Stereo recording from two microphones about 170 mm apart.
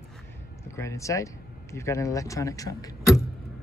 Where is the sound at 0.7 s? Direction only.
15° left (ahead or behind).